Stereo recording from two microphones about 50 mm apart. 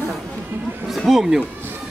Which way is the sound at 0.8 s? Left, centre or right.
Centre.